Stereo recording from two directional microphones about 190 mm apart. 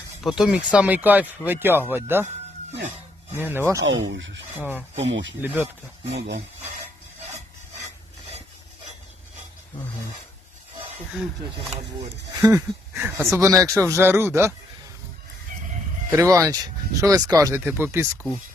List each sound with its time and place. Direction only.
0.2 s speech: centre (ahead or behind)
3.3 s speech: 10° right (ahead or behind)
3.8 s speech: 80° right
4.1 s speech: 70° right (ahead or behind)
5.4 s speech: 10° right (ahead or behind)
6.1 s speech: 60° right (ahead or behind)
11.9 s speech: 15° right (ahead or behind)
16.1 s speech: 15° right (ahead or behind)